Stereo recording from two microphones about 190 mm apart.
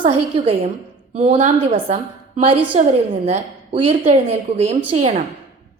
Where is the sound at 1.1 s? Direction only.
40° right (ahead or behind).